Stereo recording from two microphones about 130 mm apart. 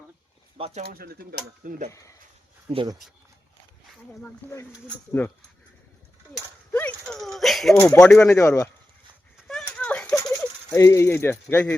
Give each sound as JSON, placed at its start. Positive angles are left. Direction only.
{"t": 0.5, "sound": "speech", "side_deg": -50}
{"t": 1.2, "sound": "speech", "side_deg": -90}
{"t": 1.9, "sound": "speech", "side_deg": 25}
{"t": 2.6, "sound": "speech", "side_deg": -35}
{"t": 5.2, "sound": "speech", "side_deg": 15}
{"t": 6.7, "sound": "speech", "side_deg": 10}
{"t": 7.8, "sound": "speech", "side_deg": 20}
{"t": 9.5, "sound": "a sound", "side_deg": 5}
{"t": 10.7, "sound": "speech", "side_deg": 25}